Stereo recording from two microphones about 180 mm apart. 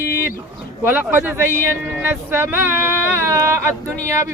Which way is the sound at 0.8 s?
10° right (ahead or behind).